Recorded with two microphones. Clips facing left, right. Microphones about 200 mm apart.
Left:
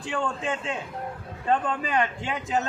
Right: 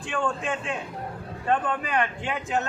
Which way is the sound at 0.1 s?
25° left (ahead or behind).